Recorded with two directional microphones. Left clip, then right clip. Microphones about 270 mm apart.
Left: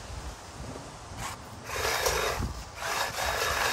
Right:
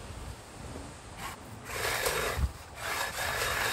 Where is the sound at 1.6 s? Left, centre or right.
Left.